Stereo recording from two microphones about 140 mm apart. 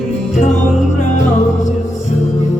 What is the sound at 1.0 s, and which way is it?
Music, 60° left (ahead or behind).